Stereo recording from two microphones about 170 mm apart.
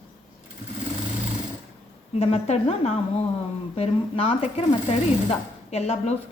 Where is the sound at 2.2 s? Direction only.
40° left (ahead or behind).